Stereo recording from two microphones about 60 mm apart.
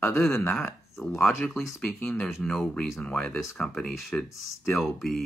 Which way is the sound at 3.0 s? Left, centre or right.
Centre.